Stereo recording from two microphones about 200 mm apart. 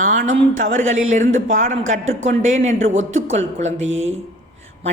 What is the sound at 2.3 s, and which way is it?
Speech, 35° right (ahead or behind).